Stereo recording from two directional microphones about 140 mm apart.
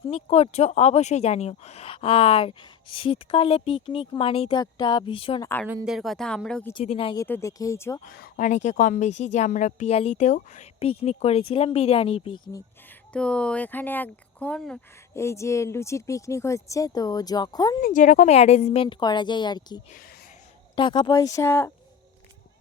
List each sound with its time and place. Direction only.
0.1 s a woman's voice: 45° left (ahead or behind)
5.4 s speech: 15° left (ahead or behind)
5.8 s speech: centre (ahead or behind)
6.8 s a woman's voice: 40° left (ahead or behind)
7.2 s speech: 20° left (ahead or behind)
8.0 s speech: 80° left; by 12.4 s 45° left (ahead or behind)
13.1 s speech: 5° left (ahead or behind)
15.1 s speech: 20° left (ahead or behind)
17.8 s a woman's voice: 70° left (ahead or behind)
18.3 s a woman's voice: 50° left (ahead or behind); by 21.7 s 20° left (ahead or behind)